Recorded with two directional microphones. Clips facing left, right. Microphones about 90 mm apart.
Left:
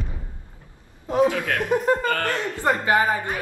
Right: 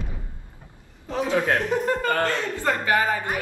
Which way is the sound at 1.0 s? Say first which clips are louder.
Left 8 dB; 15° left (ahead or behind).